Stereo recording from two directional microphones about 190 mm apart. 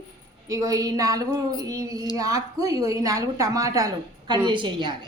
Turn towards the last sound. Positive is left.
turn(degrees=-25)  # may be behind; listen again after turning